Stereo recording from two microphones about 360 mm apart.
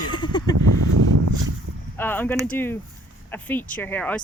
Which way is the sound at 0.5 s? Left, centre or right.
Right.